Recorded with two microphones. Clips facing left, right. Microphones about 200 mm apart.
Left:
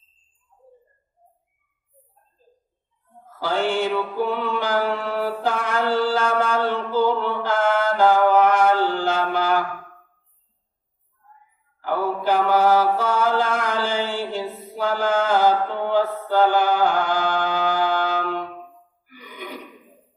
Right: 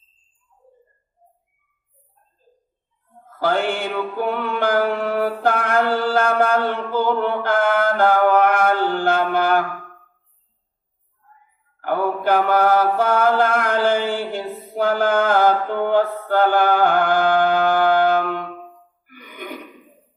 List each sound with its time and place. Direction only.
3.2 s music: 55° right (ahead or behind)
11.8 s mantra: 55° right (ahead or behind)
19.0 s a sound: 55° right (ahead or behind)